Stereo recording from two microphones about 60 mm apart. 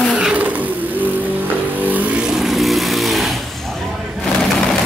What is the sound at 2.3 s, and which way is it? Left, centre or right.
Vehicle, centre.